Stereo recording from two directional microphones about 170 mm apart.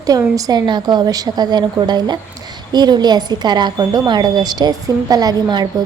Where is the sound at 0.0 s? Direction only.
20° right (ahead or behind).